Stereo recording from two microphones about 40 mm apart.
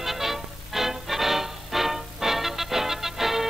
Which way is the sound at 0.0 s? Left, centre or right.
Centre.